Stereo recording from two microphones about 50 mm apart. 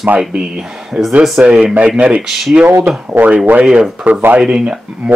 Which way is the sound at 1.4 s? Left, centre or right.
Right.